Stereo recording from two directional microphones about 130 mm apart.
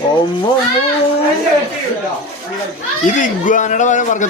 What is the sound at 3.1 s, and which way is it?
Speech, 90° left.